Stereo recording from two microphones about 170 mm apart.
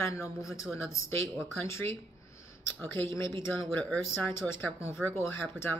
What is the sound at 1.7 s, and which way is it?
Speech, 15° left (ahead or behind).